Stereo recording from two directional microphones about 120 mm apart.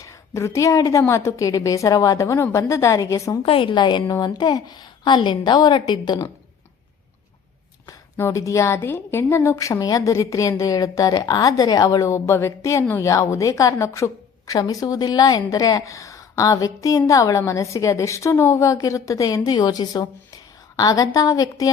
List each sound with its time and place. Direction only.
0.0 s a woman's voice: 25° left (ahead or behind)
3.4 s a woman's voice: 50° left (ahead or behind)
8.3 s a woman's voice: 25° left (ahead or behind)